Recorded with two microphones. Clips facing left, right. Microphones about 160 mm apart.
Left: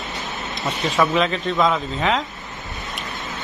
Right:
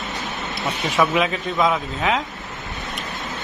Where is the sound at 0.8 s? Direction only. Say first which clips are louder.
Left 1 dB; 5° right (ahead or behind).